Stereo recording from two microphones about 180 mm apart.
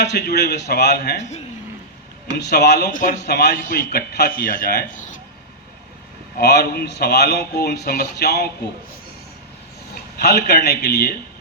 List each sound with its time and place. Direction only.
0.0 s a man's voice: 65° left (ahead or behind)
2.4 s a man's voice: 65° left (ahead or behind); by 5.1 s 45° left (ahead or behind)
6.3 s a man's voice: 65° left (ahead or behind)
10.5 s a man's voice: 65° left (ahead or behind)